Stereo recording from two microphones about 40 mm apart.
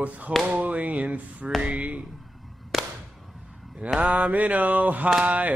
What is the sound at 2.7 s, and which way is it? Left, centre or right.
Whip, centre.